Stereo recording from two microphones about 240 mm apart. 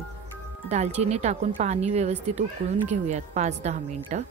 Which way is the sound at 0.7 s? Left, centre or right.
Right.